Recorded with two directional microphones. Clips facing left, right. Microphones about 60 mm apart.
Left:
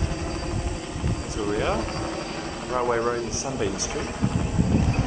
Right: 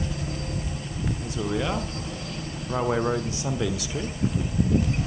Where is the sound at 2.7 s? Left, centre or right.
Centre.